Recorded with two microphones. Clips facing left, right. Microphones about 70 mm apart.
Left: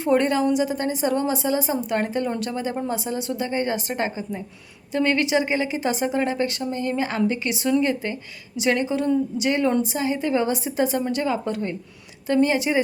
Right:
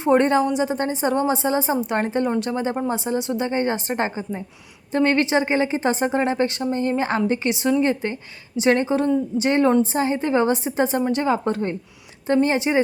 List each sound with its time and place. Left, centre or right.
0.0 s a woman's voice: right